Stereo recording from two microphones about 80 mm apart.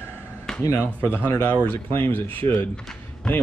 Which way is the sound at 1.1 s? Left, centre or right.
Left.